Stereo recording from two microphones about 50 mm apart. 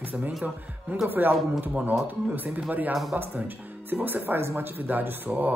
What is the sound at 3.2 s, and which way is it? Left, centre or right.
Speech, right.